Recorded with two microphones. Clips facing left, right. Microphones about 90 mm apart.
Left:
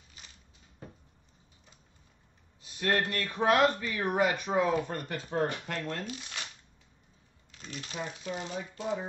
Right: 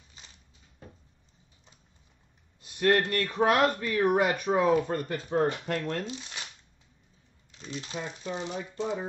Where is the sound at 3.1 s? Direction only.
50° right (ahead or behind).